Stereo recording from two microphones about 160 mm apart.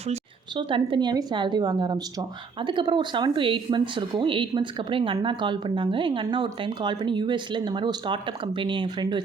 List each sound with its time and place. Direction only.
0.5 s a woman's voice: 30° right (ahead or behind)